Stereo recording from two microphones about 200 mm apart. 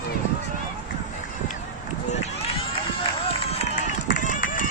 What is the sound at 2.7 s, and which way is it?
Run, 30° left (ahead or behind).